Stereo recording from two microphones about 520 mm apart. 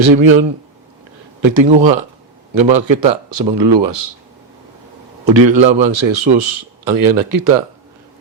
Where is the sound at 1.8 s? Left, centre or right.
Right.